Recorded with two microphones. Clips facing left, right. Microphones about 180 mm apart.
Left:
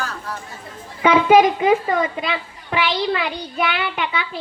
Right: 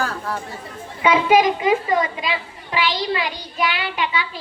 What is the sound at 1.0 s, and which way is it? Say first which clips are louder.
A woman's voice: left 3 dB; 50° left (ahead or behind).